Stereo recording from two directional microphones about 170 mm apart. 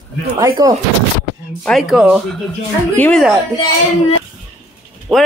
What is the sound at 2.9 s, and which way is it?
Speech, 10° left (ahead or behind).